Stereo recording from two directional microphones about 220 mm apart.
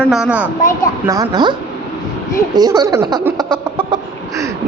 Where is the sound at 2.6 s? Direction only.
15° right (ahead or behind).